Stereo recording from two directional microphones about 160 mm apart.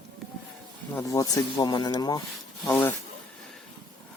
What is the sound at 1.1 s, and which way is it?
Speech, 25° left (ahead or behind).